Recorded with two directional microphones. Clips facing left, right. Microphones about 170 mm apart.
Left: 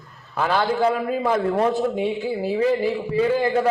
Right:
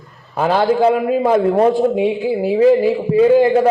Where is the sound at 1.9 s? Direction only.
10° right (ahead or behind).